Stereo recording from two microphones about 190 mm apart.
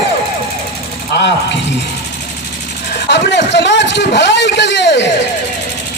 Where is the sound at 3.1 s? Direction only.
65° left (ahead or behind).